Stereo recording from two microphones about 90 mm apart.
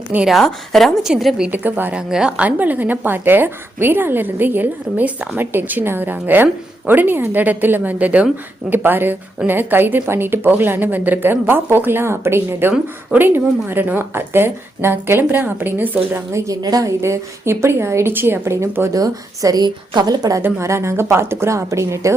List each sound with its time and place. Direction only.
0.3 s a woman's voice: centre (ahead or behind)
1.5 s a woman's voice: 20° right (ahead or behind)
16.3 s a woman's voice: 40° right (ahead or behind)
17.0 s a woman's voice: 30° right (ahead or behind)
18.9 s a woman's voice: 40° right (ahead or behind)
20.4 s a woman's voice: 30° right (ahead or behind)